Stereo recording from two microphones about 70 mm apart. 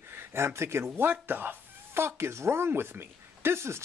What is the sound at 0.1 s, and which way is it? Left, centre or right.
Speech, right.